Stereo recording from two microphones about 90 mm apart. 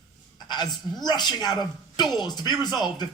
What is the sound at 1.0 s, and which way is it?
Speech, 55° left (ahead or behind).